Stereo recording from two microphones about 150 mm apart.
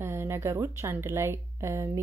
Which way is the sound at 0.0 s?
15° right (ahead or behind).